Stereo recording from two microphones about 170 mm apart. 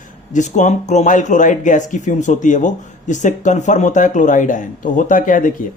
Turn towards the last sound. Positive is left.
turn(degrees=50)  # may be behind; listen again after turning